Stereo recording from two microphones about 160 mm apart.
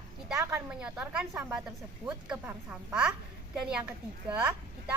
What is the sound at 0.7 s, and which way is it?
A woman's voice, 5° right (ahead or behind).